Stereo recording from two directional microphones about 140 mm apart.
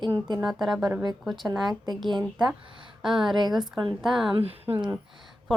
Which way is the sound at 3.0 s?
Centre (ahead or behind).